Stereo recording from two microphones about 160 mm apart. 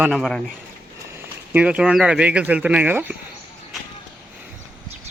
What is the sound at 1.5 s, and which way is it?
Speech, 10° right (ahead or behind).